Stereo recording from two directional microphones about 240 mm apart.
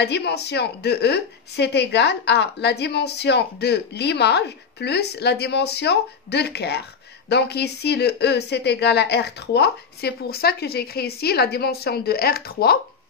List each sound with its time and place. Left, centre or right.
0.0 s speech: left